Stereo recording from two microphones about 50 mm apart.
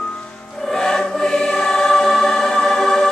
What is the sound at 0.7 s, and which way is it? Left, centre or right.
Choir, centre.